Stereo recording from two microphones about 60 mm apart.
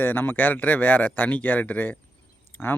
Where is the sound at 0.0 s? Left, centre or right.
Left.